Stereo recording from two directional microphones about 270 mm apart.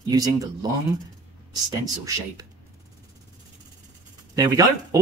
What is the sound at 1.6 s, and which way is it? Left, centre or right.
Speech, centre.